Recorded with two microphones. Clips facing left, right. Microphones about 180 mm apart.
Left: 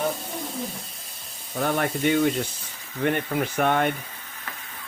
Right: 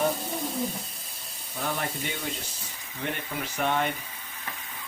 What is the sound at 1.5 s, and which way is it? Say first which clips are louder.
Speech: left 7 dB; 60° left (ahead or behind).